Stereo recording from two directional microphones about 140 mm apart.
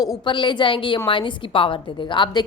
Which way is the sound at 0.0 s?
30° left (ahead or behind).